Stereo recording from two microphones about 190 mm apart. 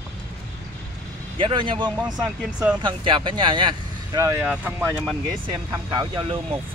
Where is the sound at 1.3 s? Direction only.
25° right (ahead or behind); by 5.1 s 5° right (ahead or behind).